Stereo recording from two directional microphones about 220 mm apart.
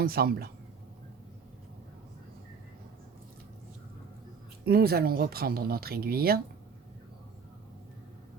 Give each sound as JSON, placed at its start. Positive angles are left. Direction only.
{"t": 0.0, "sound": "speech", "side_deg": -45}
{"t": 4.6, "sound": "speech", "side_deg": -45}